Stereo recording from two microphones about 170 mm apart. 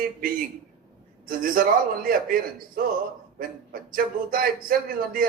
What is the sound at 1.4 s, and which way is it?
A man's voice, 55° right (ahead or behind).